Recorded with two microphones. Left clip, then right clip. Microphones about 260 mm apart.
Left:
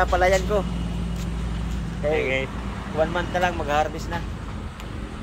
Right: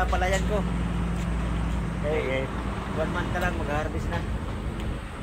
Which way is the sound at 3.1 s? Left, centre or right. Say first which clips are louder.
Left 5 dB; centre.